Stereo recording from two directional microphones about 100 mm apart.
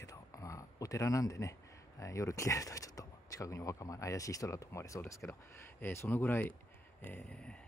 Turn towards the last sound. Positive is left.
turn(degrees=10)  # may be behind; listen again after turning